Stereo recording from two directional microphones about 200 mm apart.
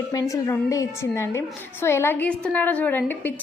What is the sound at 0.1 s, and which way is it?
A woman's voice, 15° left (ahead or behind).